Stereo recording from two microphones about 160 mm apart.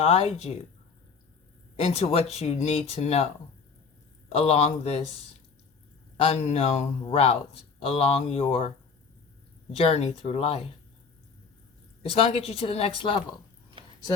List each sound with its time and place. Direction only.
0.0 s speech: 40° left (ahead or behind)
1.7 s speech: 40° left (ahead or behind)
4.4 s speech: 40° left (ahead or behind)
6.1 s speech: 40° left (ahead or behind)
9.7 s speech: 40° left (ahead or behind)
12.1 s speech: 40° left (ahead or behind)